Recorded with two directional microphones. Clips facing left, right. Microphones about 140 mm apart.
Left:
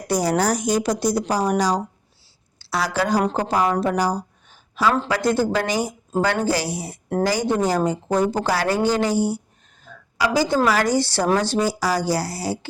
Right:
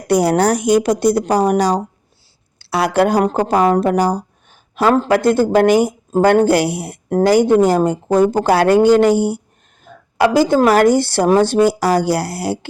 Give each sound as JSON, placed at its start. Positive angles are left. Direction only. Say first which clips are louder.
{"t": 0.1, "sound": "speech", "louder": "right 6 dB", "side_deg": -60}